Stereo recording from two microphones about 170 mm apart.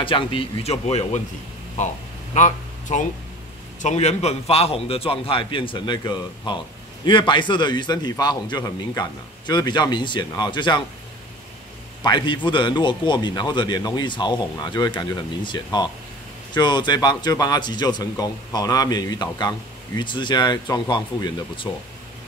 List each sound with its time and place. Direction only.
0.0 s a man's voice: 30° left (ahead or behind)
12.0 s a man's voice: 25° left (ahead or behind)